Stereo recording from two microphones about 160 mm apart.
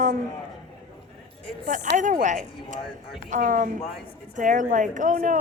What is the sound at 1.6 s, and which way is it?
Speech, 55° right (ahead or behind).